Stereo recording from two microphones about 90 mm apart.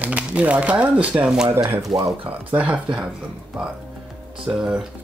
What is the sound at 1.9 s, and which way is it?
Speech, 45° right (ahead or behind).